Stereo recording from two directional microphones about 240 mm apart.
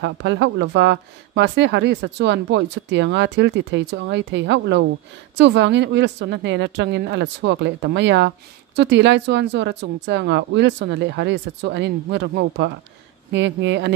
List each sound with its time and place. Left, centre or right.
0.0 s speech: right